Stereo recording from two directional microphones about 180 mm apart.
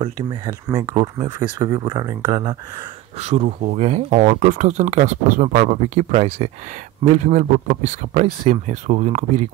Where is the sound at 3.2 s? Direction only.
35° right (ahead or behind).